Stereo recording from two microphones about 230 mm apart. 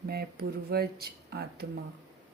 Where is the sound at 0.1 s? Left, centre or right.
Right.